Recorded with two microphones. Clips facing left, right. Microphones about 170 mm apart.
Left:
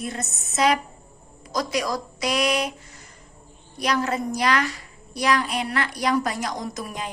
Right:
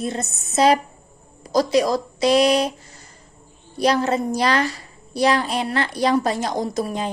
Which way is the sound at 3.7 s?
30° right (ahead or behind).